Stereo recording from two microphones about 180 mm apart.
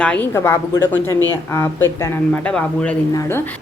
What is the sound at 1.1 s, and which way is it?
Speech, 20° right (ahead or behind).